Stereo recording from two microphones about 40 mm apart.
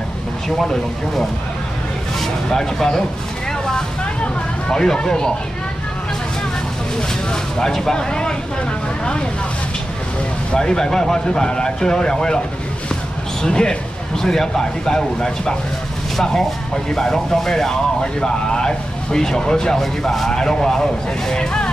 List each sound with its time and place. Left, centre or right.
2.1 s a sound: centre
4.6 s speech: centre
7.5 s speech: centre
10.5 s speech: centre
13.4 s speech: centre